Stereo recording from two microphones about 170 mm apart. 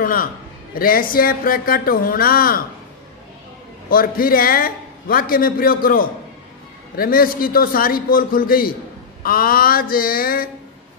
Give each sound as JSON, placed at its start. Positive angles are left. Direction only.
{"t": 0.0, "sound": "a man's voice", "side_deg": 55}
{"t": 3.9, "sound": "a man's voice", "side_deg": 60}